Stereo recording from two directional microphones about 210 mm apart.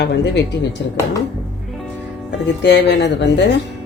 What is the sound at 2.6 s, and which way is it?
Speech, 55° left (ahead or behind).